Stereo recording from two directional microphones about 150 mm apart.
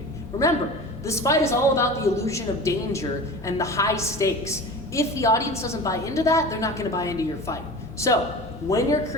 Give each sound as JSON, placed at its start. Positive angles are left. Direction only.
{"t": 1.0, "sound": "a woman's voice", "side_deg": 20}